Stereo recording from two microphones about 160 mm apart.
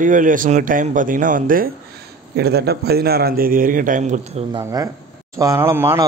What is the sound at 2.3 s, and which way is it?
A man's voice, 80° right.